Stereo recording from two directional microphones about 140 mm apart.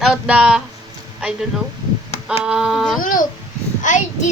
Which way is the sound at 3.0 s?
70° left (ahead or behind).